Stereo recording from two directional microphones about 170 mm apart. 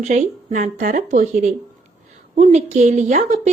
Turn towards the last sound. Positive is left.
turn(degrees=-45)  # may be behind; listen again after turning